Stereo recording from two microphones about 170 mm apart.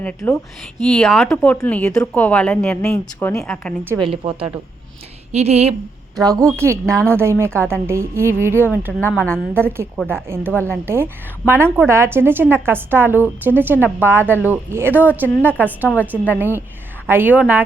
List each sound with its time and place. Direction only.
0.0 s a woman's voice: 10° left (ahead or behind)
4.0 s speech: 30° right (ahead or behind)
6.1 s a woman's voice: 20° right (ahead or behind)
8.9 s a woman's voice: 10° left (ahead or behind)
10.2 s a woman's voice: 15° right (ahead or behind)
15.9 s a woman's voice: 10° left (ahead or behind)
16.4 s a woman's voice: 10° right (ahead or behind)